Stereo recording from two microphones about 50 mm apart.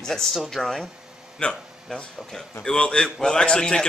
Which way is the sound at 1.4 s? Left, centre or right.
Left.